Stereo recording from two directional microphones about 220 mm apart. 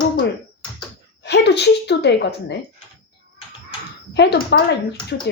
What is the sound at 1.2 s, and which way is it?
A woman's voice, 50° left (ahead or behind).